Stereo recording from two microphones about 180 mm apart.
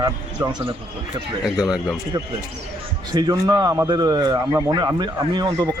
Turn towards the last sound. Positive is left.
turn(degrees=-25)  # may be behind; listen again after turning